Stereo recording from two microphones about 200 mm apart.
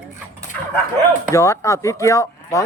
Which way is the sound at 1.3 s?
15° left (ahead or behind).